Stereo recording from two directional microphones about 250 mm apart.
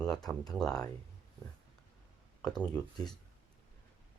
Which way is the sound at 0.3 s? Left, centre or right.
Centre.